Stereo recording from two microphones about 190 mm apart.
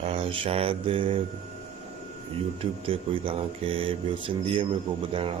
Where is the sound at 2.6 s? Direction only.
30° right (ahead or behind).